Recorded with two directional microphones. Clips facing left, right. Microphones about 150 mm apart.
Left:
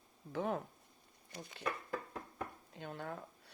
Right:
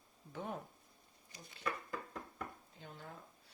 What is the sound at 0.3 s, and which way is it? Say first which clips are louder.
Speech: left 7 dB; 80° left.